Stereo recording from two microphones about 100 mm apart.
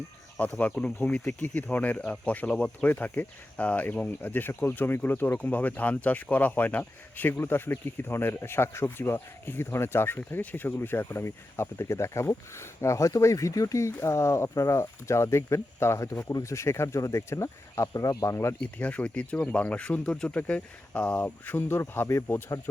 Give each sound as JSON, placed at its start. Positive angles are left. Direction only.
{"t": 0.4, "sound": "speech", "side_deg": 15}
{"t": 18.6, "sound": "speech", "side_deg": 15}